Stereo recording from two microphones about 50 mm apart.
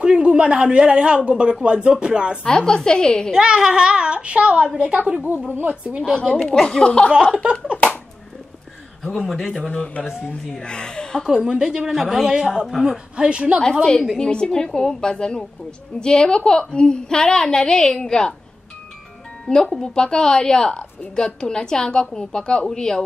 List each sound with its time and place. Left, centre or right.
0.0 s speech: centre
2.4 s a woman's voice: centre
3.3 s speech: centre
6.4 s a woman's voice: centre
6.8 s a man's voice: centre
9.0 s speech: centre
9.5 s a man's voice: left
10.3 s a woman's voice: centre
10.6 s a woman's voice: centre
11.2 s a woman's voice: centre
13.1 s speech: right
14.1 s a woman's voice: centre
19.4 s a woman's voice: centre